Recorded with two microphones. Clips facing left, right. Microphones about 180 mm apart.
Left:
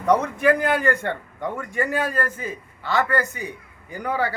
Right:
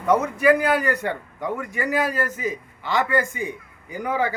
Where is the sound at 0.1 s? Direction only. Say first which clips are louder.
Right 1 dB; 5° right (ahead or behind).